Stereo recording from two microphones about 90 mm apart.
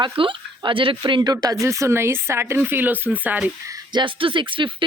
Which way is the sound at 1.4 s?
35° right (ahead or behind).